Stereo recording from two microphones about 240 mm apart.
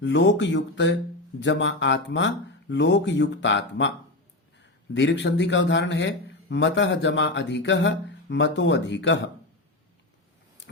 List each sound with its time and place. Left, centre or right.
0.0 s a man's voice: left
4.9 s a man's voice: left